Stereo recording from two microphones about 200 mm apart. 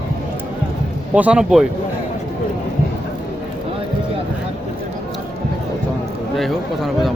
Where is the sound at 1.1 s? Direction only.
5° right (ahead or behind).